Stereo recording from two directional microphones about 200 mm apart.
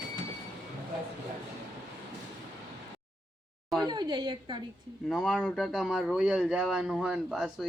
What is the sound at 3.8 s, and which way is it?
Speech, 20° right (ahead or behind).